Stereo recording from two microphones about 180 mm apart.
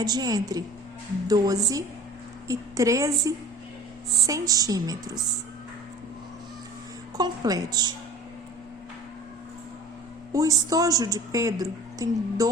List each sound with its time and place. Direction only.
0.0 s a woman's voice: 20° right (ahead or behind)
7.2 s a woman's voice: 20° right (ahead or behind)
10.3 s a woman's voice: 20° right (ahead or behind)